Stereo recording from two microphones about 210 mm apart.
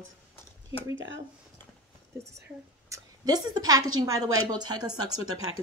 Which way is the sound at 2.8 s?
15° right (ahead or behind).